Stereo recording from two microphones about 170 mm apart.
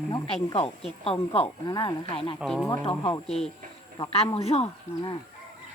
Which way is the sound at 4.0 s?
35° left (ahead or behind).